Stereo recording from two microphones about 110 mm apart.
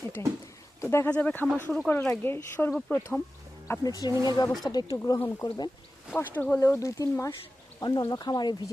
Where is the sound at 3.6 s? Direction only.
30° left (ahead or behind).